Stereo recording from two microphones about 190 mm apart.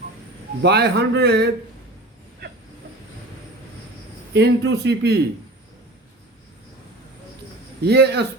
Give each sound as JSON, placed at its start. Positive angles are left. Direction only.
{"t": 0.6, "sound": "speech", "side_deg": -60}
{"t": 4.4, "sound": "speech", "side_deg": -60}
{"t": 7.8, "sound": "speech", "side_deg": -60}